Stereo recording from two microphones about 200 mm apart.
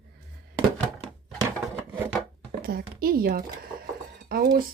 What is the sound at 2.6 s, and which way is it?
Speech, 50° right (ahead or behind).